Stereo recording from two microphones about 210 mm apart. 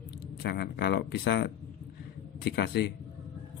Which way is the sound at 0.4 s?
50° left (ahead or behind).